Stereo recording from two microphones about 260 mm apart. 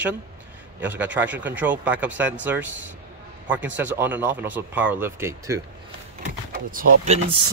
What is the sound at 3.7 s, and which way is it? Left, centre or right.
Speech, centre.